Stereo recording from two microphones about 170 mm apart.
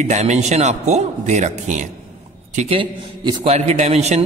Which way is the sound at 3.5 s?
40° right (ahead or behind).